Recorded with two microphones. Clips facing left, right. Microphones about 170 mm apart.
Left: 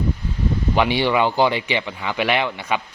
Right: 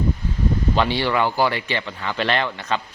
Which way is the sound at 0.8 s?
15° left (ahead or behind).